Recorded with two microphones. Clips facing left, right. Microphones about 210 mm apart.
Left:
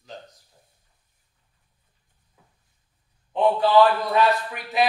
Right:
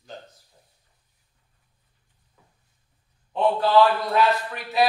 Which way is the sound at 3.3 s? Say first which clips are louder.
Left 1 dB; 15° left (ahead or behind).